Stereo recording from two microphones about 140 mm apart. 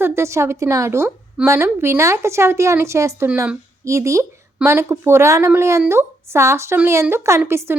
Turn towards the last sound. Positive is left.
turn(degrees=-15)  # may be behind; listen again after turning